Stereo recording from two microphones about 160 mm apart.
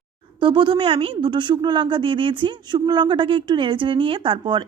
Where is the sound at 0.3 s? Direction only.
30° right (ahead or behind).